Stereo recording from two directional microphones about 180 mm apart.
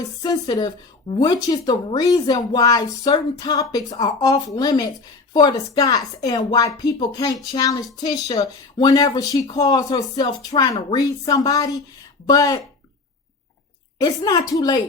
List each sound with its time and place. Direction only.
0.2 s speech: 20° left (ahead or behind)
14.0 s speech: 20° left (ahead or behind)